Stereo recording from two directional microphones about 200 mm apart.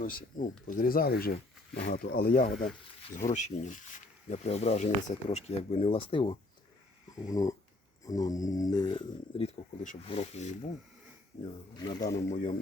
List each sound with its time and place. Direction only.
0.0 s speech: 45° left (ahead or behind); by 6.3 s 25° left (ahead or behind)
7.3 s dog: 15° left (ahead or behind)
8.0 s speech: 15° left (ahead or behind); by 10.7 s 35° left (ahead or behind)
11.8 s speech: 20° left (ahead or behind)
12.3 s speech: 40° left (ahead or behind)